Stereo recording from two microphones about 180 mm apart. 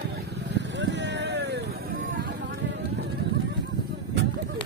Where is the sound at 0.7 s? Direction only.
80° right.